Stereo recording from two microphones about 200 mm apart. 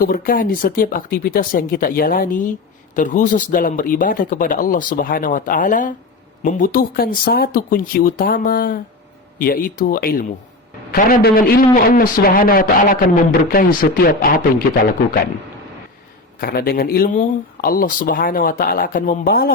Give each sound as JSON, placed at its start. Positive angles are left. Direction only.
{"t": 0.0, "sound": "speech", "side_deg": 45}
{"t": 16.4, "sound": "speech", "side_deg": 50}